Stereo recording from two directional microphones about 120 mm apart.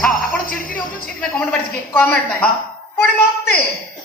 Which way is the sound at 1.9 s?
15° left (ahead or behind).